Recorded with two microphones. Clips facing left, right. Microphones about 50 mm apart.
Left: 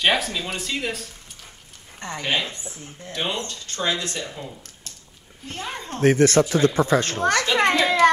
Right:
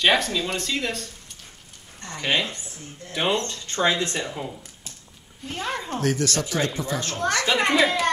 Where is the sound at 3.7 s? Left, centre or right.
Right.